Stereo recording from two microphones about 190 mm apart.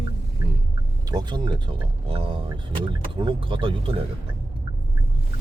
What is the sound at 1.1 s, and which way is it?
Speech, 25° right (ahead or behind).